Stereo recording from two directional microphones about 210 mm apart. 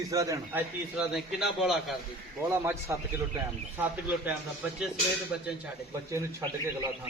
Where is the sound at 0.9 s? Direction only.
Centre (ahead or behind).